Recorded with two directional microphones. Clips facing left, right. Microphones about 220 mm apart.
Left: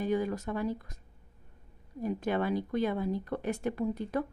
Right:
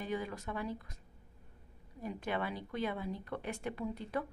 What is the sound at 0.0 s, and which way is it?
Speech, 45° left (ahead or behind).